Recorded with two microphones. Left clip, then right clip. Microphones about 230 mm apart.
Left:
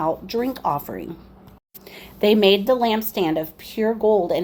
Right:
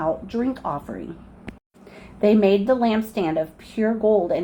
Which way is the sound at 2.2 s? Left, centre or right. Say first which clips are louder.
Left 2 dB; left.